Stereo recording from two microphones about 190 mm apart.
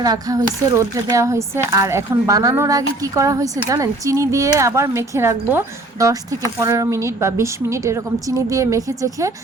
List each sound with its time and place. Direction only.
0.0 s speech: 20° right (ahead or behind)